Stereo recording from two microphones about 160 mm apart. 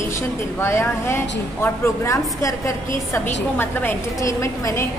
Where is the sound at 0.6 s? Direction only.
15° left (ahead or behind).